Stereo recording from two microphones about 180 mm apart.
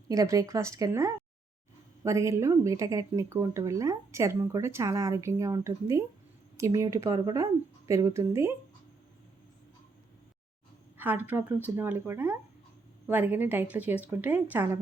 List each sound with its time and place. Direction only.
0.1 s speech: 20° right (ahead or behind)
10.9 s speech: 10° right (ahead or behind)